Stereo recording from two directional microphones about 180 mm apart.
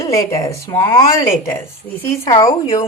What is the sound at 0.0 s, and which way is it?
Speech, 20° left (ahead or behind).